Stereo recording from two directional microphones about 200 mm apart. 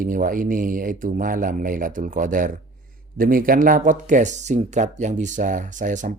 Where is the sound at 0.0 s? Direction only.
45° right (ahead or behind).